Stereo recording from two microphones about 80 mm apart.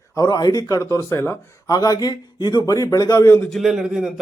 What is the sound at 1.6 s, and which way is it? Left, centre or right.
Speech, left.